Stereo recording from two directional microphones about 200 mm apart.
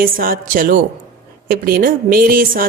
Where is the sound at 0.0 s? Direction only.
45° right (ahead or behind).